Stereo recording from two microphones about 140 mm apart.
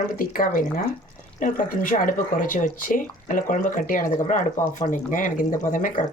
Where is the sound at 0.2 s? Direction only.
80° left.